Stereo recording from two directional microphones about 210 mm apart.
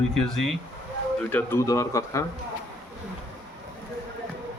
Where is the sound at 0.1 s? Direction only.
Centre (ahead or behind).